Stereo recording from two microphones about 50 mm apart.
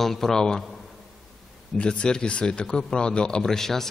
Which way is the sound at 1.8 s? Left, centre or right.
Centre.